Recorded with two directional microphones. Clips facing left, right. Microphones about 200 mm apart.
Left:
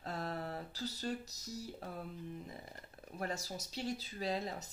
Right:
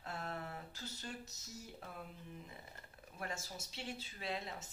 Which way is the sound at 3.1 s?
40° left (ahead or behind).